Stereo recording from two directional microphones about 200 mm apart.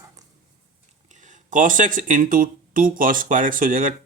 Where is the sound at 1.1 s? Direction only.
40° right (ahead or behind).